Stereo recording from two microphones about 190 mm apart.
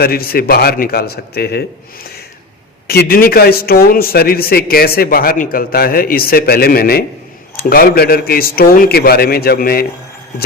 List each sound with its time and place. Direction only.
0.0 s a man's voice: 55° left (ahead or behind)
2.8 s a man's voice: 55° left (ahead or behind)